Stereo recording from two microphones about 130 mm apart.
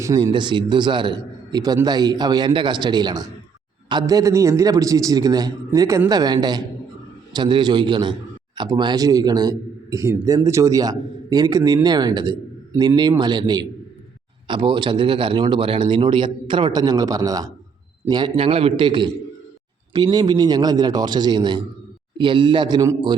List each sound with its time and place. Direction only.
0.0 s a man's voice: 30° right (ahead or behind)
18.1 s a man's voice: 40° right (ahead or behind)